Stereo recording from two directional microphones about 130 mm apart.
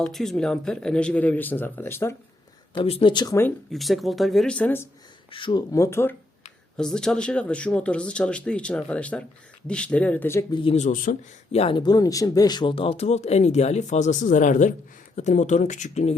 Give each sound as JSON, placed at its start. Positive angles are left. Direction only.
{"t": 0.0, "sound": "speech", "side_deg": 5}
{"t": 2.7, "sound": "speech", "side_deg": 45}
{"t": 3.7, "sound": "speech", "side_deg": 0}
{"t": 5.3, "sound": "speech", "side_deg": 40}
{"t": 5.7, "sound": "speech", "side_deg": 20}
{"t": 6.7, "sound": "speech", "side_deg": 5}
{"t": 10.5, "sound": "speech", "side_deg": 40}
{"t": 10.8, "sound": "speech", "side_deg": 80}
{"t": 11.5, "sound": "speech", "side_deg": 50}
{"t": 11.8, "sound": "speech", "side_deg": 30}